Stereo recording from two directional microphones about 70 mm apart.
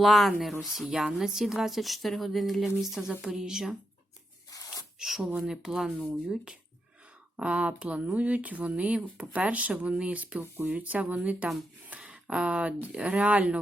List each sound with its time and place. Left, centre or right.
0.0 s speech: centre
4.9 s speech: centre